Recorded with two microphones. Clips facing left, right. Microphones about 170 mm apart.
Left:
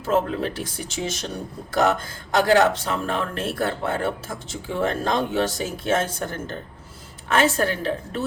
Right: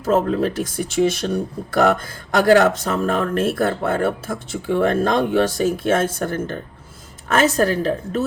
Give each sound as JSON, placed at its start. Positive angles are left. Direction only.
{"t": 0.0, "sound": "speech", "side_deg": -40}
{"t": 7.3, "sound": "a woman's voice", "side_deg": -40}